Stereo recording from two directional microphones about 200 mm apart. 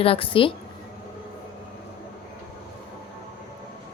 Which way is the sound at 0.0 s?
25° left (ahead or behind).